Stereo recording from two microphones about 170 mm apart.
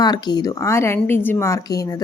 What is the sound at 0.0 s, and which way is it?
A woman's voice, 25° left (ahead or behind).